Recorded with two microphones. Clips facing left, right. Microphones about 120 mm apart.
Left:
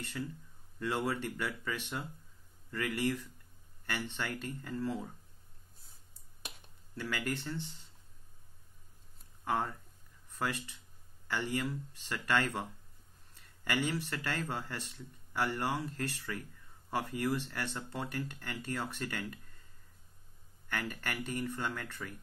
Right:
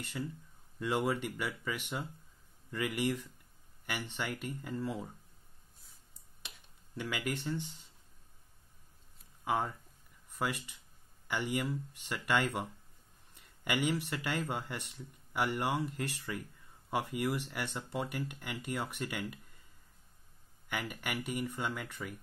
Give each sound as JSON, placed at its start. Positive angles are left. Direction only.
{"t": 0.2, "sound": "speech", "side_deg": -5}
{"t": 7.0, "sound": "speech", "side_deg": -15}
{"t": 9.4, "sound": "speech", "side_deg": -10}
{"t": 20.6, "sound": "speech", "side_deg": -10}